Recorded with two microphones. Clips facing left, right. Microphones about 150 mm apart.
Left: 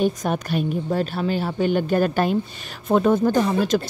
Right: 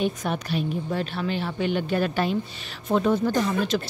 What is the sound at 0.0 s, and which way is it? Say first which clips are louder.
A woman's voice: left 4 dB; 40° left (ahead or behind).